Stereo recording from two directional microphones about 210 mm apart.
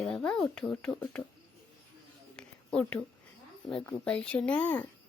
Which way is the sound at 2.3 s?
5° left (ahead or behind).